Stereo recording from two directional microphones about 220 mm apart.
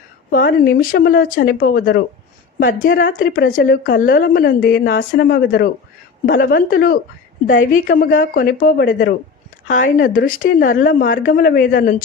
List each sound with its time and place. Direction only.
0.4 s speech: 40° left (ahead or behind)